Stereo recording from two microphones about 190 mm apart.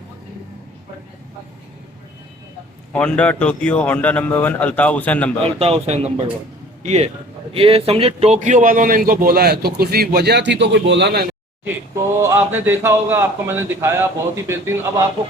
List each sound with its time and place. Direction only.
2.9 s speech: 5° left (ahead or behind)
5.5 s a man's voice: 30° right (ahead or behind); by 11.3 s 60° right (ahead or behind)
12.2 s a man's voice: 15° right (ahead or behind)